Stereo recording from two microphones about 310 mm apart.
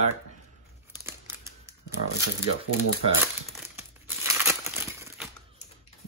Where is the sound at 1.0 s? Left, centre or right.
Centre.